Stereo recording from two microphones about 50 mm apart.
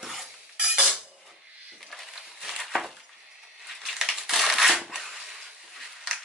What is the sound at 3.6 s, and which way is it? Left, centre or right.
Crushing, centre.